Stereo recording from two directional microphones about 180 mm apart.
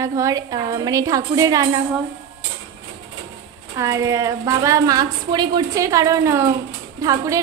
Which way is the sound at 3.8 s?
15° right (ahead or behind).